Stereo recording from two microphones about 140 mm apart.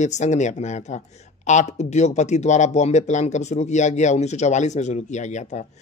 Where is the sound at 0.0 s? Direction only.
55° left (ahead or behind).